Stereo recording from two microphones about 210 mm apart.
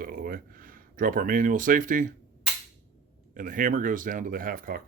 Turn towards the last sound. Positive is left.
turn(degrees=-40)  # may be behind; listen again after turning